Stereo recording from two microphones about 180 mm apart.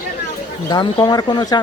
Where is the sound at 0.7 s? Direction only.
25° left (ahead or behind).